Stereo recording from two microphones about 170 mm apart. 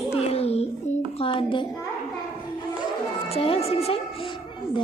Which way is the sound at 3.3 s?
35° left (ahead or behind).